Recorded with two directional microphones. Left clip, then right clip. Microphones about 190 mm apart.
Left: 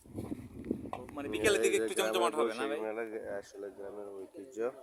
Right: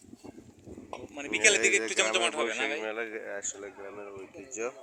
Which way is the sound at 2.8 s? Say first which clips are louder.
Right 3 dB; centre (ahead or behind).